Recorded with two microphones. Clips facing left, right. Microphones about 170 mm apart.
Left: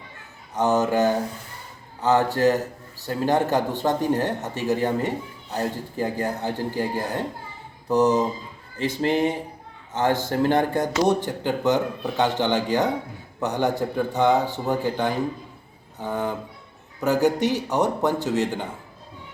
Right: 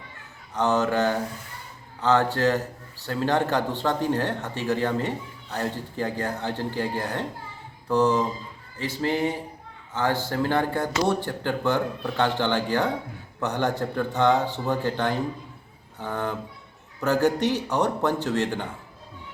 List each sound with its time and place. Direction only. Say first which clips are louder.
0.5 s a man's voice: left 2 dB; 15° left (ahead or behind)